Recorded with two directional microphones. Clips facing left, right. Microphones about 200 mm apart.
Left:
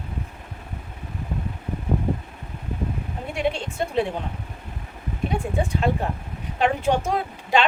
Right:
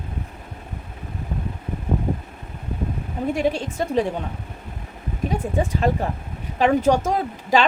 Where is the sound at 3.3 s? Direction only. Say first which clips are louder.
Right 3 dB; 40° right (ahead or behind).